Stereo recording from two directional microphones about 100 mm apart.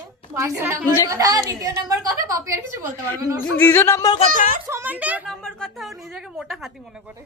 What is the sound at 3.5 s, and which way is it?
Speech, 20° left (ahead or behind).